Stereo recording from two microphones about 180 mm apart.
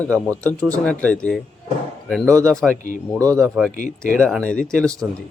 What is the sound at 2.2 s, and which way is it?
Speech, 15° right (ahead or behind).